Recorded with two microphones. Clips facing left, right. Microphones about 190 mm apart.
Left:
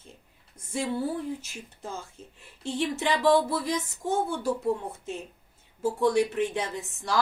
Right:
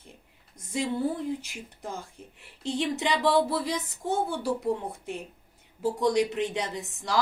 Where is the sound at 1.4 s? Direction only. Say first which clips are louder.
Right 1 dB; 15° right (ahead or behind).